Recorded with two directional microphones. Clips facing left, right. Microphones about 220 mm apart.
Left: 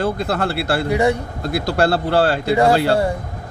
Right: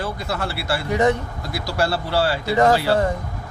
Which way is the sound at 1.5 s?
60° left (ahead or behind).